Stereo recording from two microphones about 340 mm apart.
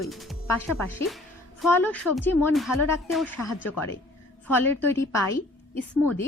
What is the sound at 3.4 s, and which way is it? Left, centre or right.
Speech, left.